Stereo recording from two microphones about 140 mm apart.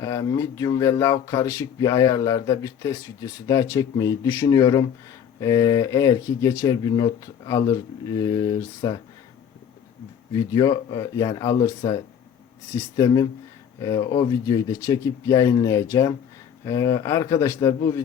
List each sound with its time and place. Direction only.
0.0 s speech: 25° left (ahead or behind)
10.3 s speech: 25° left (ahead or behind)
12.7 s speech: 25° left (ahead or behind)